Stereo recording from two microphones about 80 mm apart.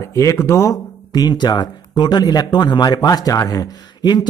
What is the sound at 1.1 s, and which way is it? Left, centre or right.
Speech, left.